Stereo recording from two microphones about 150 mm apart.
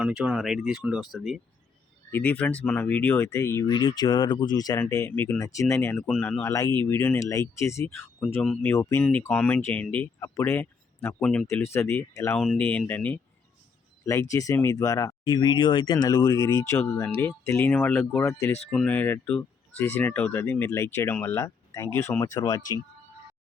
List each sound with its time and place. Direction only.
0.0 s speech: 5° right (ahead or behind)
2.0 s speech: 10° left (ahead or behind)
4.8 s speech: 15° left (ahead or behind)
6.0 s speech: 5° left (ahead or behind)
6.4 s speech: 20° left (ahead or behind); by 8.7 s 5° left (ahead or behind)
8.7 s speech: 15° left (ahead or behind)
12.4 s speech: 5° left (ahead or behind)
14.0 s speech: 20° left (ahead or behind)
18.7 s speech: 5° left (ahead or behind); by 22.7 s 25° left (ahead or behind)